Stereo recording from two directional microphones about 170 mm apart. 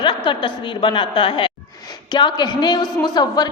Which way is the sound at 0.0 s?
30° left (ahead or behind).